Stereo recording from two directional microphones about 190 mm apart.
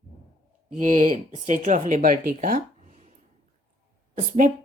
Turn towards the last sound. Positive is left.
turn(degrees=-45)  # may be behind; listen again after turning